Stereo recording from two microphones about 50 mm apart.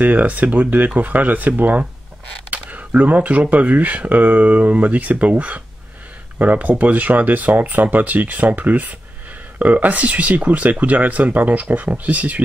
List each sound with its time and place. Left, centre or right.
0.0 s speech: right